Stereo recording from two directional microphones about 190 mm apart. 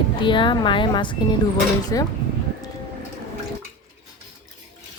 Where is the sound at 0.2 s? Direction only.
25° left (ahead or behind).